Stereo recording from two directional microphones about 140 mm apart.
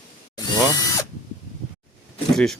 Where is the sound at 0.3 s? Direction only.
25° left (ahead or behind).